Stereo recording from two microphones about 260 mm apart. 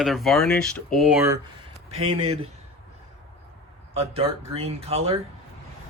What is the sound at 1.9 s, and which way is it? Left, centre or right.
Speech, right.